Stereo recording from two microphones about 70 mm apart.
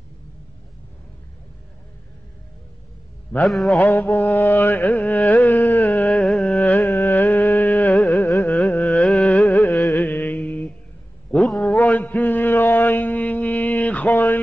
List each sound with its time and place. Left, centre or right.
3.3 s mantra: centre
3.7 s carnatic music: left
5.8 s music: left
7.9 s carnatic music: centre
9.9 s mantra: left
10.4 s a sound: left
11.3 s a sound: centre
11.6 s mantra: left
14.1 s a sound: left